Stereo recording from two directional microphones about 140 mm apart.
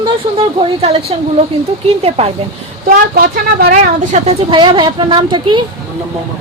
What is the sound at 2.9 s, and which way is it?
Speech, 90° right.